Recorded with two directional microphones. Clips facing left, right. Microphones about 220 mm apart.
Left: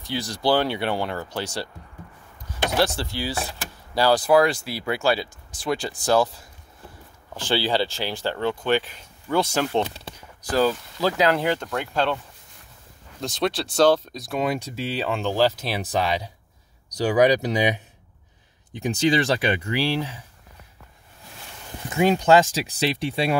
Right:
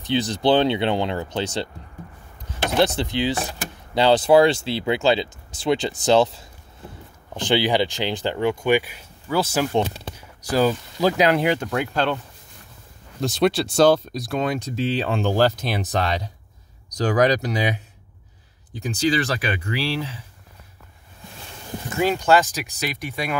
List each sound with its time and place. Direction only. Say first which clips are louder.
0.0 s speech: right 5 dB; 20° right (ahead or behind)
2.8 s speech: right 5 dB; 20° right (ahead or behind); by 12.2 s centre (ahead or behind)
13.2 s speech: right 5 dB; 10° right (ahead or behind)
14.2 s speech: right 1 dB; 5° left (ahead or behind)
18.7 s speech: left 1 dB; 25° left (ahead or behind)
21.9 s speech: left 2 dB; 20° left (ahead or behind)